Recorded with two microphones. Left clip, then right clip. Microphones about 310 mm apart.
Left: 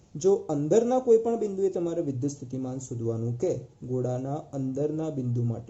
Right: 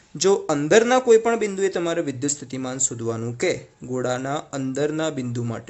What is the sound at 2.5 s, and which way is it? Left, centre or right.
Speech, right.